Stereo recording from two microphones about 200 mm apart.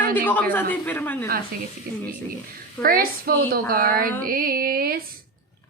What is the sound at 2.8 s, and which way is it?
A woman's voice, 45° right (ahead or behind).